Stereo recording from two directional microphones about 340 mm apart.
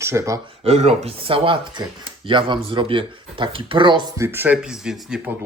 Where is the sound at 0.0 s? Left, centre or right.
Centre.